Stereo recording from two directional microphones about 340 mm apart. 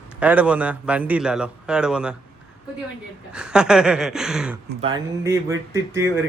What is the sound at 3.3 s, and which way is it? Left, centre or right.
A man's voice, centre.